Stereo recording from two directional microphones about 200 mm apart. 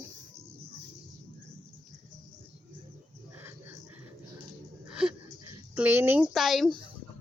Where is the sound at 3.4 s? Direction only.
10° right (ahead or behind).